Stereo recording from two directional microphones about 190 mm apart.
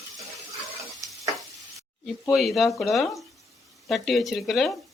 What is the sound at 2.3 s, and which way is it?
Speech, centre (ahead or behind).